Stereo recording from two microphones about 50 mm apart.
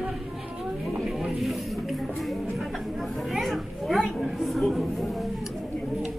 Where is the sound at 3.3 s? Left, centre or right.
Centre.